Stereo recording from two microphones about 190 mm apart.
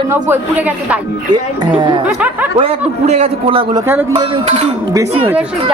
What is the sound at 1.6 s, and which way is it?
Speech, 25° right (ahead or behind).